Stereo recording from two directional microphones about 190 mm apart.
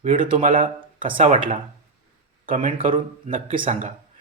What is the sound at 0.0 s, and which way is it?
A man's voice, 45° right (ahead or behind).